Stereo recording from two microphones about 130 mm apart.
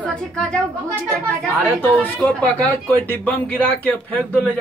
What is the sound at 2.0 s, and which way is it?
A man's voice, 10° left (ahead or behind).